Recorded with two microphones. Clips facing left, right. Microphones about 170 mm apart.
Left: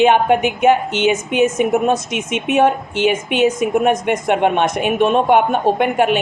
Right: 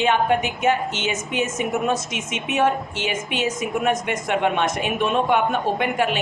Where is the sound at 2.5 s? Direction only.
55° left (ahead or behind).